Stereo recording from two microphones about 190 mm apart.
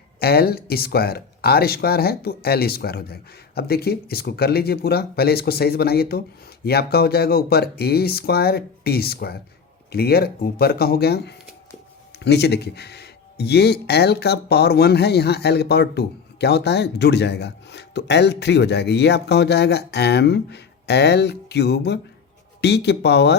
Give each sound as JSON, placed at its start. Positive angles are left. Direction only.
{"t": 0.2, "sound": "speech", "side_deg": 55}